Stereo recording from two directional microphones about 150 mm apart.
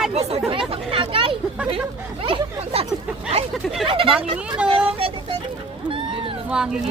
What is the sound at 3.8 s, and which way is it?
Speech, 35° right (ahead or behind).